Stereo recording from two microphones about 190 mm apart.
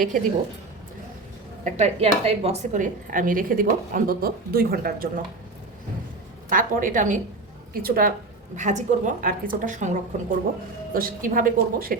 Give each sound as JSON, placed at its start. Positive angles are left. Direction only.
{"t": 0.1, "sound": "a woman's voice", "side_deg": -45}
{"t": 1.6, "sound": "a woman's voice", "side_deg": -35}
{"t": 6.5, "sound": "a woman's voice", "side_deg": -45}
{"t": 8.5, "sound": "a woman's voice", "side_deg": -40}